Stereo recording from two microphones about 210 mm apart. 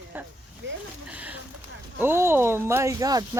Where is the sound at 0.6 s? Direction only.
60° right (ahead or behind).